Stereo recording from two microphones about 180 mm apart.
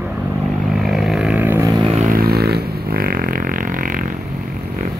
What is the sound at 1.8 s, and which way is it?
Vehicle, 40° right (ahead or behind).